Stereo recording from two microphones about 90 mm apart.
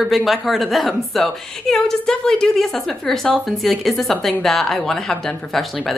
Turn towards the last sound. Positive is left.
turn(degrees=0)  # may be behind; listen again after turning